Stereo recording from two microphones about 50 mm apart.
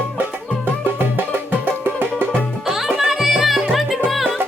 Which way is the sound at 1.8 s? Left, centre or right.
Right.